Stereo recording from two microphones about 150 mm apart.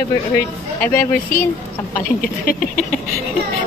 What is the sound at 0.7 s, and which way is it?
Speech, 15° left (ahead or behind).